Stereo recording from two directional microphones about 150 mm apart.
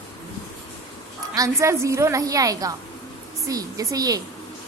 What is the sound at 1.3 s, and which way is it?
A woman's voice, 20° right (ahead or behind).